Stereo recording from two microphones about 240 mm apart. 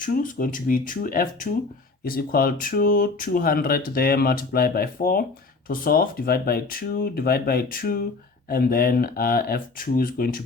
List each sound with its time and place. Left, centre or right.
0.0 s speech: left